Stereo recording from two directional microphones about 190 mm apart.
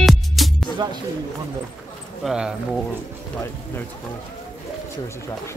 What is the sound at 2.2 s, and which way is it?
Speech, 5° right (ahead or behind).